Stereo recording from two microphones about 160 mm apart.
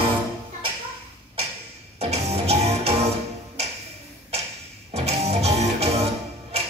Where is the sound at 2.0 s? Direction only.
40° right (ahead or behind).